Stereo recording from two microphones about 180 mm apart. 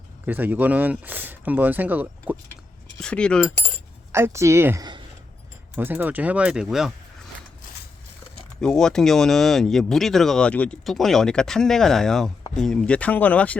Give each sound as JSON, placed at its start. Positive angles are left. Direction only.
{"t": 0.3, "sound": "speech", "side_deg": -10}
{"t": 3.0, "sound": "speech", "side_deg": 5}
{"t": 4.1, "sound": "speech", "side_deg": -15}
{"t": 5.7, "sound": "speech", "side_deg": -10}
{"t": 8.6, "sound": "speech", "side_deg": 5}